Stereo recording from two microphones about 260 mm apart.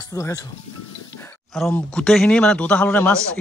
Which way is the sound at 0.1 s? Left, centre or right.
Centre.